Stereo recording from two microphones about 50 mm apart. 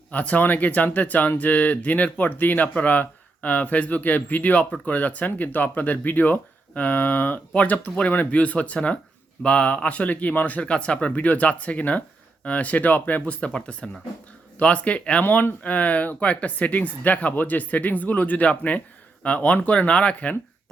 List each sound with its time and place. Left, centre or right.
0.1 s speech: left
7.5 s a man's voice: left
13.4 s a man's voice: left
15.2 s a man's voice: left